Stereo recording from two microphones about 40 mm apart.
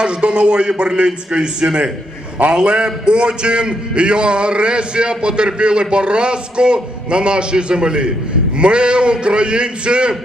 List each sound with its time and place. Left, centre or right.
0.0 s a man's voice: right